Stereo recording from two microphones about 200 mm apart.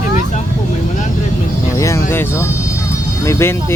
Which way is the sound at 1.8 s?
15° left (ahead or behind).